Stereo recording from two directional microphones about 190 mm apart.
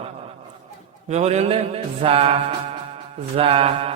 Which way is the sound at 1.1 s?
35° right (ahead or behind).